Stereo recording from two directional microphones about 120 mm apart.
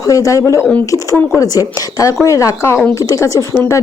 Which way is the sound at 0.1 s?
30° left (ahead or behind).